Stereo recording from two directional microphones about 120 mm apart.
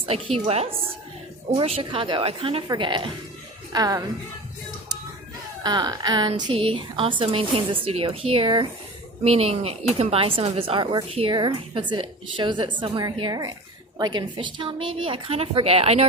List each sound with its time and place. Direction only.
0.0 s a woman's voice: 50° right (ahead or behind)
3.7 s a woman's voice: 30° right (ahead or behind)
5.6 s speech: 35° right (ahead or behind)
6.5 s speech: 50° right (ahead or behind)
9.2 s speech: 60° right (ahead or behind)